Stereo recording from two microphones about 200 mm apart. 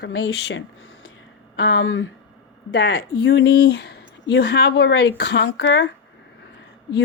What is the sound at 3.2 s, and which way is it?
Speech, 65° left (ahead or behind).